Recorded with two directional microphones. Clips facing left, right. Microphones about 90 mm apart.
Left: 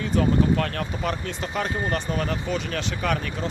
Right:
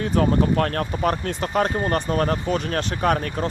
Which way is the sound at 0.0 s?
45° right (ahead or behind).